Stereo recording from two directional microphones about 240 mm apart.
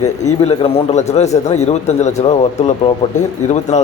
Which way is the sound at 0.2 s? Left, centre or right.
Left.